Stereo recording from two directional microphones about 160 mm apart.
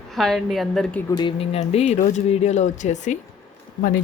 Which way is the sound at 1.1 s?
30° left (ahead or behind).